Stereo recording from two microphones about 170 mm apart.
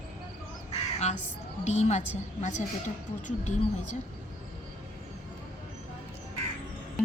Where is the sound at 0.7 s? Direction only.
40° left (ahead or behind).